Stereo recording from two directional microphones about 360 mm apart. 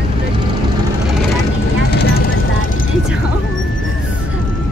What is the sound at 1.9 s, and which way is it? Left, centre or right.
Vehicle, left.